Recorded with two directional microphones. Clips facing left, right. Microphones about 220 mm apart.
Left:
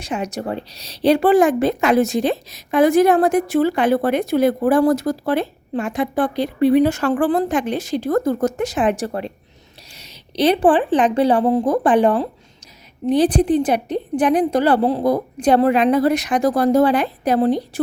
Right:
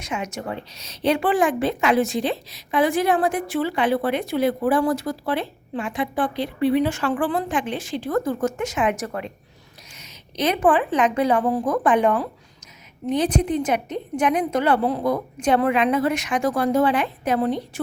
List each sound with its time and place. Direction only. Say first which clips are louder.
0.0 s a woman's voice: left 5 dB; 35° left (ahead or behind)